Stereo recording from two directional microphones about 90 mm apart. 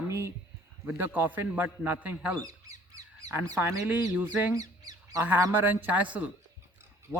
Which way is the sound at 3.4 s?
40° right (ahead or behind).